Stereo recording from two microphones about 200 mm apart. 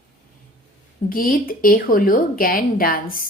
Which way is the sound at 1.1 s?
45° left (ahead or behind).